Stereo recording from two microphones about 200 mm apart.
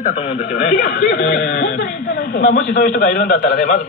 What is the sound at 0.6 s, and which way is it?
A man's voice, 40° left (ahead or behind).